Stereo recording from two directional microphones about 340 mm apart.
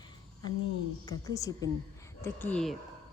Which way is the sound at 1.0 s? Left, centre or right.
Centre.